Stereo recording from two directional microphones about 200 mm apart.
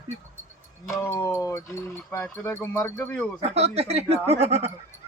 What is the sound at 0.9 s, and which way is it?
Speech, 15° left (ahead or behind).